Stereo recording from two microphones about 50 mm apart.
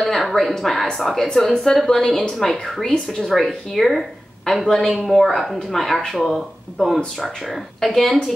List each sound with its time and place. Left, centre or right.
0.0 s a woman's voice: centre